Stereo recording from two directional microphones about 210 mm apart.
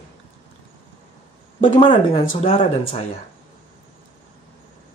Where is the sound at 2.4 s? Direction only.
25° left (ahead or behind).